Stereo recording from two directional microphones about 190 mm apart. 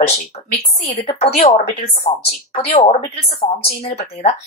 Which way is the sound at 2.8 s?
35° left (ahead or behind).